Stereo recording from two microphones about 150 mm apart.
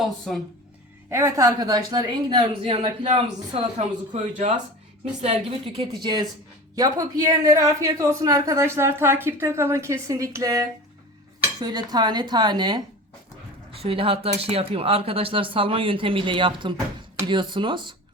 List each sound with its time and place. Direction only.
0.0 s speech: centre (ahead or behind)
1.1 s a woman's voice: 20° right (ahead or behind); by 4.5 s 55° right (ahead or behind)
5.2 s a woman's voice: 40° right (ahead or behind)
13.8 s a woman's voice: 35° right (ahead or behind)